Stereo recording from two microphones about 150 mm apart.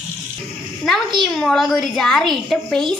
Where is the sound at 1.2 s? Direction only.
5° left (ahead or behind).